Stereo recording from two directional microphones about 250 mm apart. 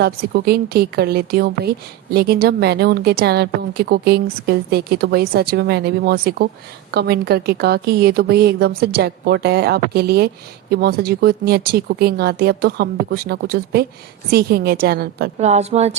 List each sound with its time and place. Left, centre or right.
0.0 s speech: right
15.4 s a woman's voice: right